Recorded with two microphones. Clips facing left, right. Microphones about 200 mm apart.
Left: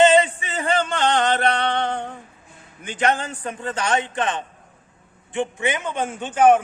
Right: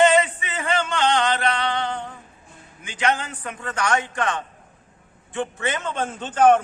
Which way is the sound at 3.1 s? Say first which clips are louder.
Even; 35° left (ahead or behind).